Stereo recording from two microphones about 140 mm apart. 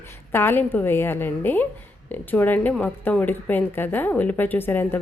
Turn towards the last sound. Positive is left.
turn(degrees=15)  # may be behind; listen again after turning